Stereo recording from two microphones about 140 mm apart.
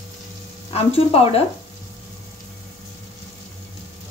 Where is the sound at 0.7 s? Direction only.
45° left (ahead or behind).